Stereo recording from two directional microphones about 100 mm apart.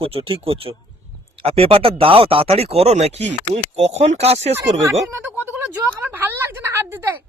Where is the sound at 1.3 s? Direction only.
75° right (ahead or behind).